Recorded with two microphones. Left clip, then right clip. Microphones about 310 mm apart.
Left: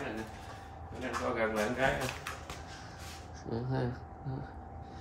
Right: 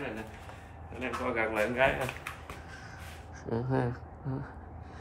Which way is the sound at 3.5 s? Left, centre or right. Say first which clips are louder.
Right 4 dB; right.